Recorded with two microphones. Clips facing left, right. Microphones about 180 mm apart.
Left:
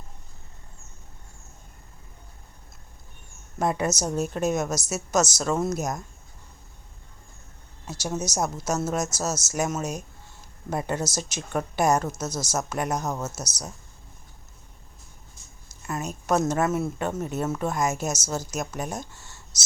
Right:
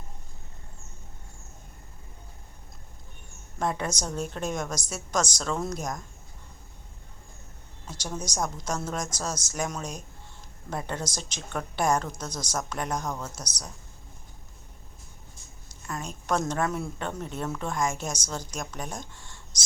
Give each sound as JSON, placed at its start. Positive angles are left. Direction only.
{"t": 3.6, "sound": "a woman's voice", "side_deg": 10}
{"t": 7.9, "sound": "a woman's voice", "side_deg": 10}
{"t": 15.9, "sound": "a woman's voice", "side_deg": 10}
{"t": 19.5, "sound": "whispering", "side_deg": 5}